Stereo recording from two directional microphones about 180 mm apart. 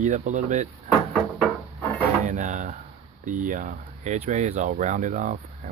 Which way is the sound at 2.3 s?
45° right (ahead or behind).